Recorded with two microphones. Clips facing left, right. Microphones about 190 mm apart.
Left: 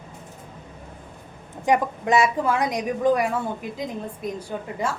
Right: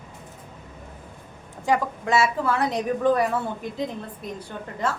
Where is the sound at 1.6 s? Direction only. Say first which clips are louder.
Left 2 dB; 20° left (ahead or behind).